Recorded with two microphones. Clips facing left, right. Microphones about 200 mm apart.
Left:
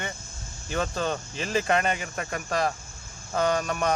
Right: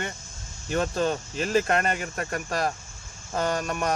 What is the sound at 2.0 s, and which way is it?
Speech, 45° right (ahead or behind).